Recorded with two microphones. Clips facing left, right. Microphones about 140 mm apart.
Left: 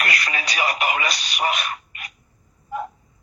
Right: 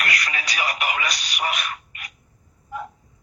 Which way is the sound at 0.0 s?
30° left (ahead or behind).